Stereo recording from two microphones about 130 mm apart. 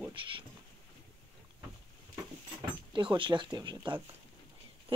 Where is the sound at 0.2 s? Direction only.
40° right (ahead or behind).